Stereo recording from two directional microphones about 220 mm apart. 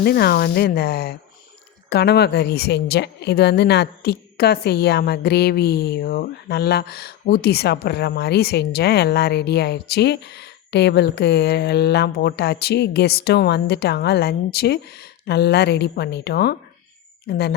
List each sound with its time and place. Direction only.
0.0 s a woman's voice: 45° left (ahead or behind)